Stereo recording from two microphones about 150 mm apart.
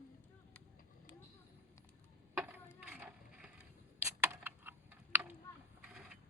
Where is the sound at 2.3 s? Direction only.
10° right (ahead or behind).